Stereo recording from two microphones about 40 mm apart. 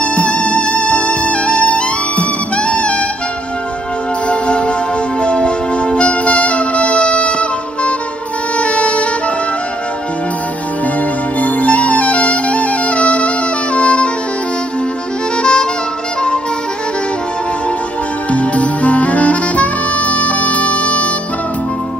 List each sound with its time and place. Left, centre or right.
0.0 s music: left
4.3 s music: left
11.3 s music: left
15.4 s saxophone: left
18.3 s music: left